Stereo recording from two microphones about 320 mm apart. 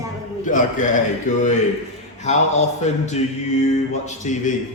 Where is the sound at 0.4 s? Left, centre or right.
Left.